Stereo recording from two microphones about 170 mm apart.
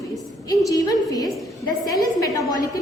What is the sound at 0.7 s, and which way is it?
A woman's voice, 20° left (ahead or behind).